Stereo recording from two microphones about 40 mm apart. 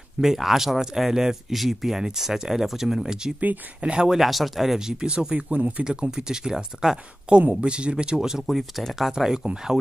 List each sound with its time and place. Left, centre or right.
0.2 s speech: centre; by 4.1 s right
4.1 s speech: centre
4.7 s speech: centre
5.5 s speech: right
5.9 s speech: centre
7.3 s speech: right
8.5 s speech: centre
9.1 s speech: centre